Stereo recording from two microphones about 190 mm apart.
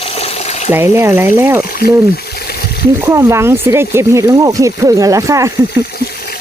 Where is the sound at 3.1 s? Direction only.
15° right (ahead or behind).